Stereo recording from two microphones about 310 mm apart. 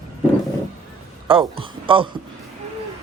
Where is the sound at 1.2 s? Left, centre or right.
Centre.